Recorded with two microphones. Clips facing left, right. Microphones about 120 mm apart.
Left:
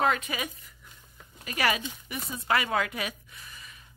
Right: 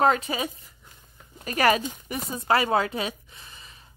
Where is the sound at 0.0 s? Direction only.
35° right (ahead or behind).